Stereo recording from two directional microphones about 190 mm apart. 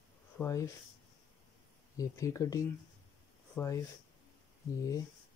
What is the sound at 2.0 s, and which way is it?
Speech, 15° left (ahead or behind).